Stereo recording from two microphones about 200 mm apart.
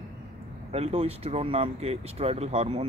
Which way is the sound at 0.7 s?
30° right (ahead or behind).